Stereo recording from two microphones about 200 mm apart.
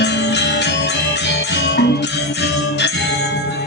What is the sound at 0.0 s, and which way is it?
Music, 60° left (ahead or behind).